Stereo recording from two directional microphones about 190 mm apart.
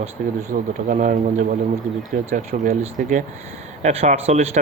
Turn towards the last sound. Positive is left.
turn(degrees=-35)  # may be behind; listen again after turning